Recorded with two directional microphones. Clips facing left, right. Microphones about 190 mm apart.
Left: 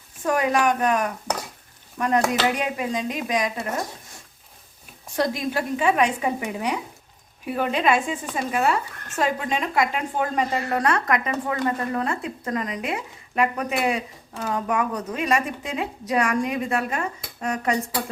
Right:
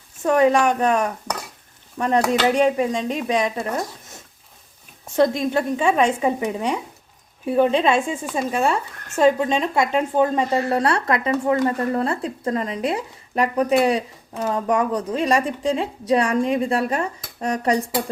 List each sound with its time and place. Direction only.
0.2 s speech: 25° right (ahead or behind)
2.0 s speech: 30° right (ahead or behind)
5.1 s a woman's voice: 25° right (ahead or behind)